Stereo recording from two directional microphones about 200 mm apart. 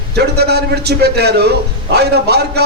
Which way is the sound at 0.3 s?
55° right (ahead or behind).